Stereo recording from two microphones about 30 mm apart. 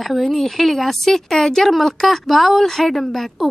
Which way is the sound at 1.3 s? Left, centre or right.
Centre.